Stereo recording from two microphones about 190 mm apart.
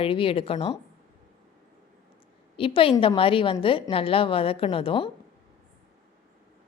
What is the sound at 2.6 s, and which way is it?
Speech, 30° left (ahead or behind).